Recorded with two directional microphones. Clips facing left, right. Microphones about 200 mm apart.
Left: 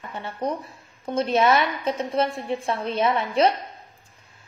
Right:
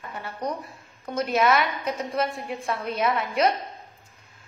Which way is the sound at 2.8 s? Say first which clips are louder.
Left 2 dB; 25° left (ahead or behind).